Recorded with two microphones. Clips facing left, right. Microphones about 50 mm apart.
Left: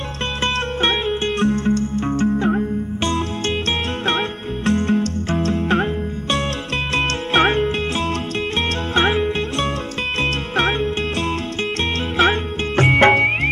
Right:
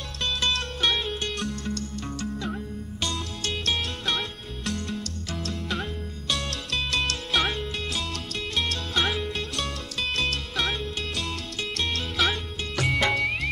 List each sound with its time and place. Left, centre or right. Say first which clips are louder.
0.8 s music: left 6 dB; left
4.6 s music: left 14 dB; left
7.0 s music: left 11 dB; left
8.9 s music: left 10 dB; left
12.2 s music: left 10 dB; left
12.8 s music: left 11 dB; left